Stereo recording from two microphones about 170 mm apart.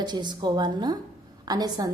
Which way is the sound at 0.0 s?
25° right (ahead or behind).